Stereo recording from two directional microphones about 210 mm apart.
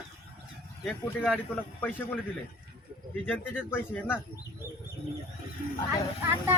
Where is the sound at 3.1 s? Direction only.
10° left (ahead or behind).